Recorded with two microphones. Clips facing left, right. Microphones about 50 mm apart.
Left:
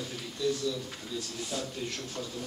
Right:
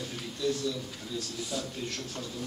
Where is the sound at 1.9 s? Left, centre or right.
Centre.